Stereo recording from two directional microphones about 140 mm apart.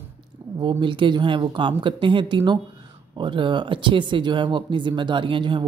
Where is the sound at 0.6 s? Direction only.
35° right (ahead or behind).